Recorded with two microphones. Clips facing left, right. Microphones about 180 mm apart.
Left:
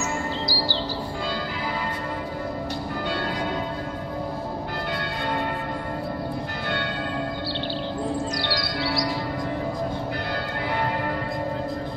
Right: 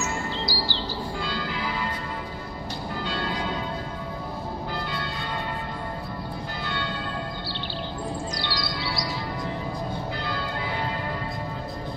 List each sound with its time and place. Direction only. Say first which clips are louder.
0.5 s chirp: left 2 dB; 40° left (ahead or behind)
8.5 s music: left 4 dB; 55° left (ahead or behind)